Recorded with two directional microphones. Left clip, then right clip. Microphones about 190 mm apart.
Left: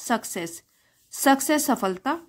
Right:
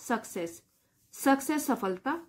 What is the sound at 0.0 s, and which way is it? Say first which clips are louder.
A woman's voice: left 6 dB; 35° left (ahead or behind).